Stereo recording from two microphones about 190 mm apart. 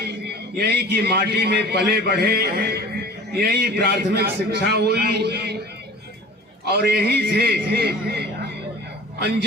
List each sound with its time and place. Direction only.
0.0 s a man's voice: 60° right (ahead or behind)
6.7 s a man's voice: 55° right (ahead or behind)